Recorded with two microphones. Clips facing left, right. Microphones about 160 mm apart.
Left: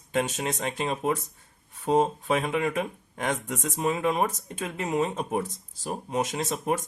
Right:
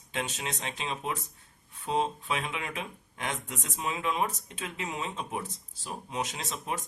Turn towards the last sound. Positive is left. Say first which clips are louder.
# left 8 dB
turn(degrees=50)  # may be behind; listen again after turning